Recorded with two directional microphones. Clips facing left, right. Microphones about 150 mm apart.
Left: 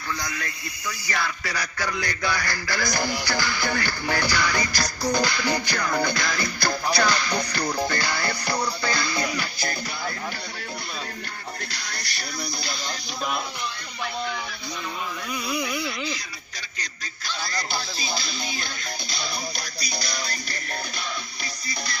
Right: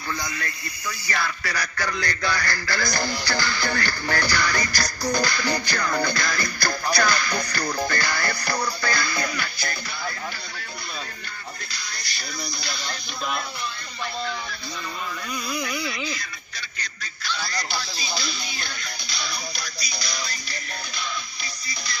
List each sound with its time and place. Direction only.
1.0 s speech: 15° left (ahead or behind)
7.0 s music: 25° left (ahead or behind)
7.7 s speech: 20° left (ahead or behind)
9.4 s music: 35° left (ahead or behind)
15.3 s a sound: 5° left (ahead or behind)
19.2 s music: 50° left (ahead or behind)